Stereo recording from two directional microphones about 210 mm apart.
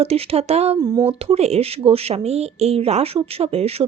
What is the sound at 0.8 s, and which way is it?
Speech, 20° right (ahead or behind).